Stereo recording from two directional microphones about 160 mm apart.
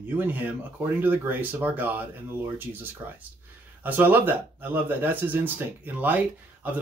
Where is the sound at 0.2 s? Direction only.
10° right (ahead or behind).